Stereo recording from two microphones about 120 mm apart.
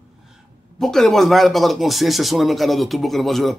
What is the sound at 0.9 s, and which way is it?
Speech, 5° left (ahead or behind).